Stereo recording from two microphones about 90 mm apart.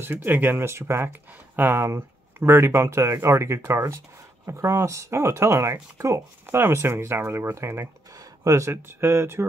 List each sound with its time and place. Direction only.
0.0 s speech: 20° right (ahead or behind)